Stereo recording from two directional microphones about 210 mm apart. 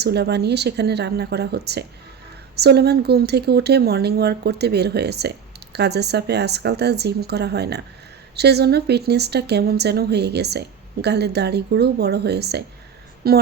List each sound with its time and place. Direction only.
0.0 s speech: 50° right (ahead or behind)